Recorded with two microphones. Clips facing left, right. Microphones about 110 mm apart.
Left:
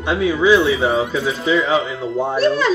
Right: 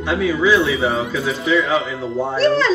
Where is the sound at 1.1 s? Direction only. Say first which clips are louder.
Even; 25° left (ahead or behind).